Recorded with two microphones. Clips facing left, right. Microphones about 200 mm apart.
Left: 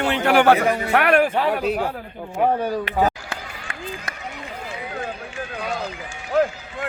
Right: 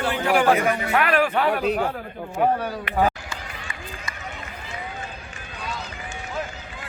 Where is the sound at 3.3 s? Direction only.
60° left (ahead or behind).